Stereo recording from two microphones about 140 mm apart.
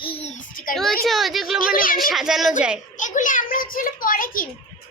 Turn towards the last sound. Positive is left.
turn(degrees=90)